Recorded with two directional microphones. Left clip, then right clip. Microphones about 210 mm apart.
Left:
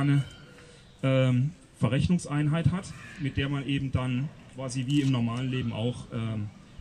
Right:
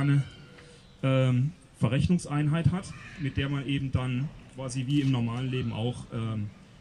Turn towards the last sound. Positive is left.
turn(degrees=-5)  # may be behind; listen again after turning